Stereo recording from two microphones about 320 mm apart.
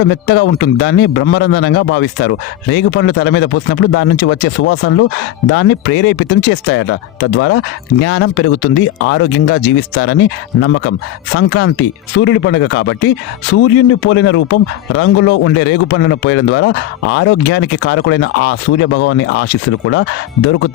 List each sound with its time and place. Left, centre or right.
0.0 s a man's voice: left